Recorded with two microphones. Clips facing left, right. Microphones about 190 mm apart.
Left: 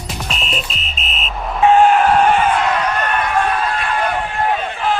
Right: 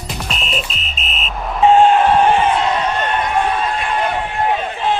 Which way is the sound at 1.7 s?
25° right (ahead or behind).